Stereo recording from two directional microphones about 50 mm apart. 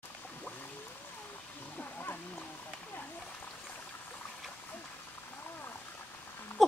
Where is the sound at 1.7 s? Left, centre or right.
Left.